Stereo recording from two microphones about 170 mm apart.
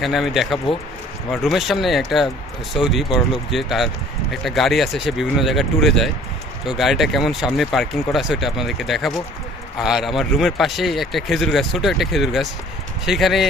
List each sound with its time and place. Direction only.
0.0 s speech: centre (ahead or behind)